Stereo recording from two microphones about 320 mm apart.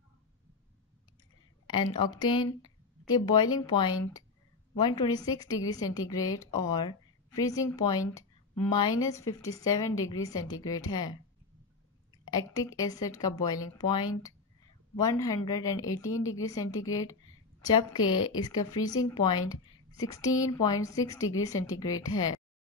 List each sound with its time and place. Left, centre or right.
1.7 s a woman's voice: centre
12.3 s a woman's voice: centre
18.0 s a woman's voice: left
18.4 s a woman's voice: centre